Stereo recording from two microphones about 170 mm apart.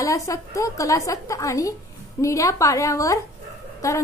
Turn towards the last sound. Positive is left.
turn(degrees=20)  # may be behind; listen again after turning